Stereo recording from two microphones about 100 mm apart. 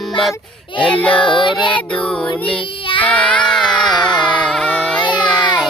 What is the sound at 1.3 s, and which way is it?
Child singing, 55° left (ahead or behind).